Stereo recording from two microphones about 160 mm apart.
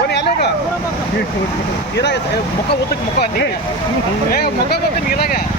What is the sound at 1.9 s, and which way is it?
Speech, 90° left.